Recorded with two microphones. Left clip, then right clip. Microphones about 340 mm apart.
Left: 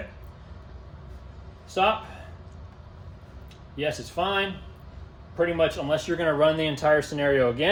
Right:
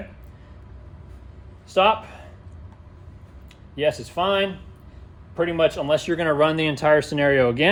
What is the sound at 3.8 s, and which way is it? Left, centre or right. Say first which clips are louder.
Speech: right 6 dB; centre.